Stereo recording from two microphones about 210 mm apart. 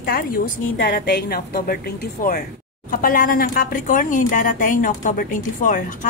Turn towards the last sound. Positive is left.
turn(degrees=40)  # may be behind; listen again after turning